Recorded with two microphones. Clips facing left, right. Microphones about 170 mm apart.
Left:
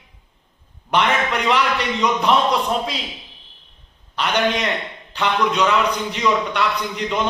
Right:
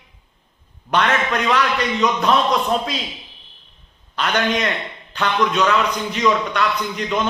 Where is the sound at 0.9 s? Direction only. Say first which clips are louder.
Even; 20° left (ahead or behind).